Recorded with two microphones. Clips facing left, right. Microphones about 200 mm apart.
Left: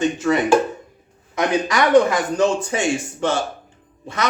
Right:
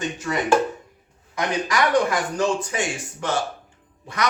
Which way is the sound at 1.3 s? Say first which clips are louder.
Left 4 dB; 25° left (ahead or behind).